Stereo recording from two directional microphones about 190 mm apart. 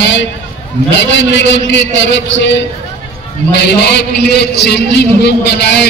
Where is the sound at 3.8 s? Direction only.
60° left (ahead or behind).